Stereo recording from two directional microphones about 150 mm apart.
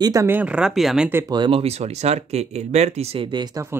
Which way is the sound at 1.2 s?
30° right (ahead or behind).